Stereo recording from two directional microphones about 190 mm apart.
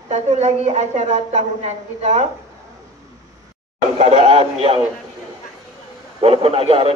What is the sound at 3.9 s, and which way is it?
Speech, 35° right (ahead or behind).